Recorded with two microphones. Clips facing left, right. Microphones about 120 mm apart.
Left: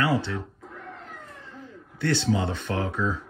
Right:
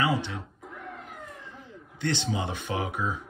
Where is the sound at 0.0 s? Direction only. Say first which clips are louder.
Left 2 dB; 20° right (ahead or behind).